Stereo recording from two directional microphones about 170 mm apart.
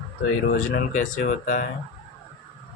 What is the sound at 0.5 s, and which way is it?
Speech, 60° left (ahead or behind).